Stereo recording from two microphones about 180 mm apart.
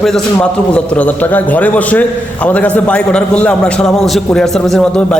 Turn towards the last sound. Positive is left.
turn(degrees=5)  # may be behind; listen again after turning